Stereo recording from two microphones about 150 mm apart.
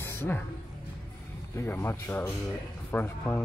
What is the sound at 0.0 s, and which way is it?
Music, 15° left (ahead or behind).